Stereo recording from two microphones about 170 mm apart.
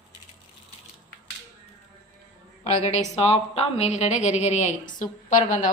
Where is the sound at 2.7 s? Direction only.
40° left (ahead or behind).